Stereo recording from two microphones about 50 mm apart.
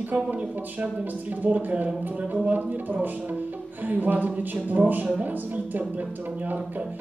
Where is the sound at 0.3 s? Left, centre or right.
Right.